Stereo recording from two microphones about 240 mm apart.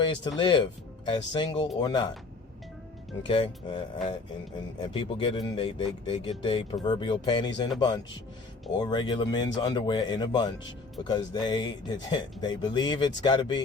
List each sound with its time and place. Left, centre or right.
0.0 s speech: centre
3.2 s speech: left